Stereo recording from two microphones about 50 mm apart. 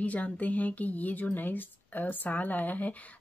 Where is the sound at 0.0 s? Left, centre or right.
Left.